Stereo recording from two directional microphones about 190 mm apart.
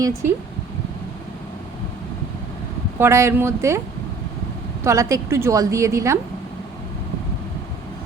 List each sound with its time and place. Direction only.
0.0 s a woman's voice: 15° right (ahead or behind)
3.0 s a woman's voice: 15° right (ahead or behind)
4.8 s a woman's voice: 15° right (ahead or behind)